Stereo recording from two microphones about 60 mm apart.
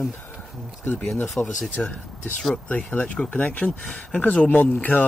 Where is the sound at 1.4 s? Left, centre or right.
Left.